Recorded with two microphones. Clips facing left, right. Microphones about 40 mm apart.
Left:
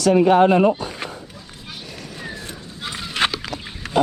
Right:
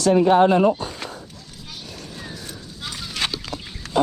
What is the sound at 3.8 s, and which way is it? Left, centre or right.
Pig, centre.